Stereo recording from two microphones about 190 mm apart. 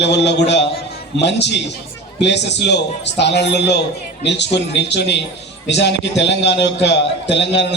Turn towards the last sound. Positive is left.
turn(degrees=65)  # may be behind; listen again after turning